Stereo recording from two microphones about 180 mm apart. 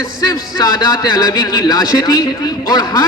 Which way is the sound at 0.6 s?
20° left (ahead or behind).